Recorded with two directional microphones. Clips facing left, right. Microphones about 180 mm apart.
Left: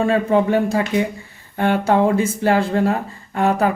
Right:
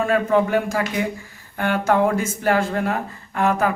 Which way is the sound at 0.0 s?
30° left (ahead or behind).